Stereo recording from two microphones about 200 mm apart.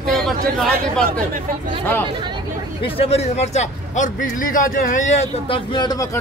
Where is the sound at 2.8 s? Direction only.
30° left (ahead or behind).